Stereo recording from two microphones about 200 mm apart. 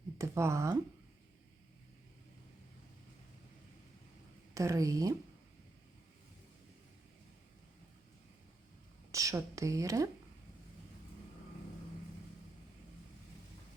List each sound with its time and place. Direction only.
0.2 s speech: 15° right (ahead or behind)
4.5 s speech: 15° right (ahead or behind)
9.1 s a woman's voice: 15° right (ahead or behind)